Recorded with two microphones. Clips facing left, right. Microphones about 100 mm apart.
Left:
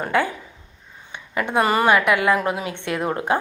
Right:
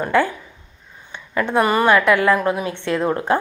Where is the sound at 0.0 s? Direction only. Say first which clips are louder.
Right 3 dB; 15° left (ahead or behind).